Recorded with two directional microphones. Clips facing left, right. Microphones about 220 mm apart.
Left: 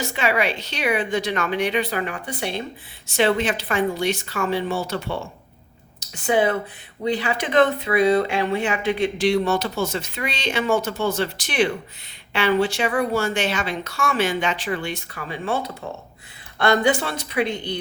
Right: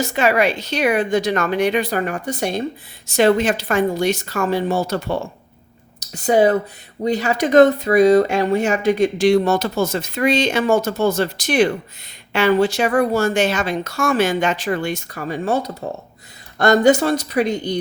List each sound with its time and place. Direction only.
0.1 s speech: 45° right (ahead or behind)